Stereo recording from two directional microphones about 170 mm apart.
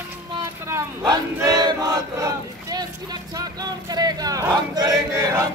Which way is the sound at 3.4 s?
20° right (ahead or behind).